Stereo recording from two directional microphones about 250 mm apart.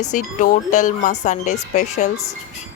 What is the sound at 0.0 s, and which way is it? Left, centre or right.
Speech, left.